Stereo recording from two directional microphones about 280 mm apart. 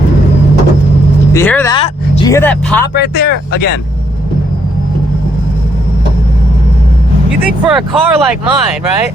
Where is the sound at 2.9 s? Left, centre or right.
Left.